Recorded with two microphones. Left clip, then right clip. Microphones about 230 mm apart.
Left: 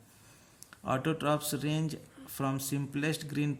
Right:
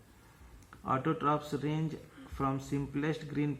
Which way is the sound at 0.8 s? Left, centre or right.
Left.